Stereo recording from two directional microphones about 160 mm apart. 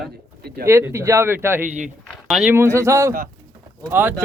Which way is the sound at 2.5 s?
15° right (ahead or behind).